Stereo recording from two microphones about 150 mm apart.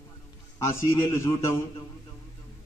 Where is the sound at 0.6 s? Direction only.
20° left (ahead or behind).